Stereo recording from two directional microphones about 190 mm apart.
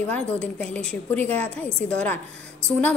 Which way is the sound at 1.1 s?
10° left (ahead or behind).